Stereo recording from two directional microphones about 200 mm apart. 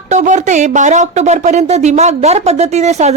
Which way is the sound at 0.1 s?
40° right (ahead or behind).